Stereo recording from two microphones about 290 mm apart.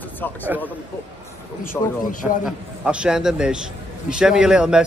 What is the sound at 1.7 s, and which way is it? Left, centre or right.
Speech, centre.